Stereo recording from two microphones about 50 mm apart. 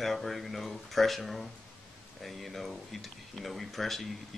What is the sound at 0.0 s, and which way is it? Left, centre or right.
Speech, centre.